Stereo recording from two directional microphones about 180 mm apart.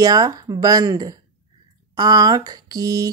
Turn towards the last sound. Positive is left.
turn(degrees=-20)  # may be behind; listen again after turning